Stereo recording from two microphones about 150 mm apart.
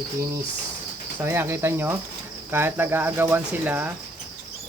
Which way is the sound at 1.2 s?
15° right (ahead or behind).